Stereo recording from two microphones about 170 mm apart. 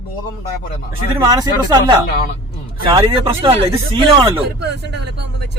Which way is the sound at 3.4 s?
30° right (ahead or behind).